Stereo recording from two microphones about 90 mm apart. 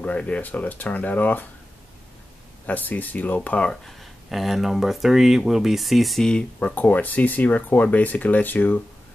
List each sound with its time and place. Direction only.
0.0 s speech: 15° left (ahead or behind)
2.6 s speech: 20° left (ahead or behind)
3.7 s speech: centre (ahead or behind); by 8.8 s 20° left (ahead or behind)